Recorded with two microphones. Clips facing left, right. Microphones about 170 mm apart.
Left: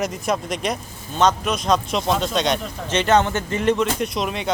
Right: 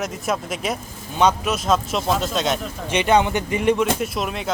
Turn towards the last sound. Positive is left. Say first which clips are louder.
# left 1 dB
turn(degrees=0)  # may be behind; listen again after turning